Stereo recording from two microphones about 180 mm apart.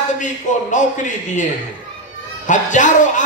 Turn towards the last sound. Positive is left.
turn(degrees=45)  # may be behind; listen again after turning